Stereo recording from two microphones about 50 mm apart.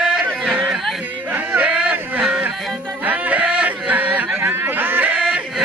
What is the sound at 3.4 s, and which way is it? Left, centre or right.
Yodeling, right.